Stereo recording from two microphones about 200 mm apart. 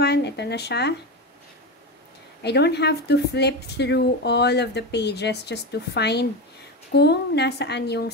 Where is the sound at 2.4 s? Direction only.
55° left (ahead or behind).